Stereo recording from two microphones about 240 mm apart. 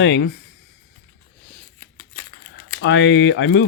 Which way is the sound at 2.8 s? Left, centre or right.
Left.